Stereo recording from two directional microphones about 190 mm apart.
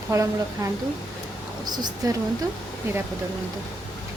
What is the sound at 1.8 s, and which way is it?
Speech, 20° right (ahead or behind).